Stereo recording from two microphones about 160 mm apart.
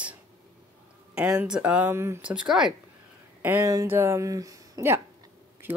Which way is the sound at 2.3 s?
Centre (ahead or behind).